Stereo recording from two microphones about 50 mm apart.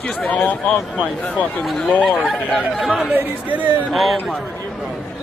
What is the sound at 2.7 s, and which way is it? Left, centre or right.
Speech, centre.